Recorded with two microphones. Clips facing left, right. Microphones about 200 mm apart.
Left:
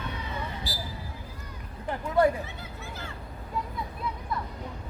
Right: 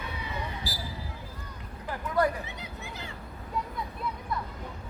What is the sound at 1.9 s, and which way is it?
Speech, 25° left (ahead or behind).